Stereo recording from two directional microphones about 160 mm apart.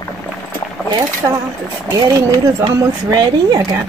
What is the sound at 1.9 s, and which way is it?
Speech, 20° right (ahead or behind).